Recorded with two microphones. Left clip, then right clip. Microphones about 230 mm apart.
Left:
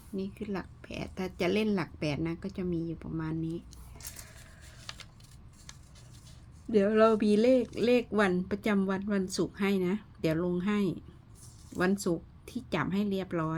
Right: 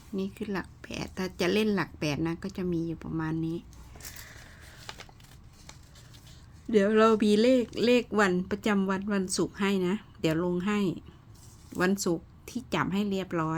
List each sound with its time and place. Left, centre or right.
0.2 s speech: centre
4.1 s a sound: centre
6.7 s speech: centre